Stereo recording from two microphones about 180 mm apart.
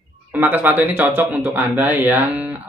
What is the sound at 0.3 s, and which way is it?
A man's voice, 10° right (ahead or behind).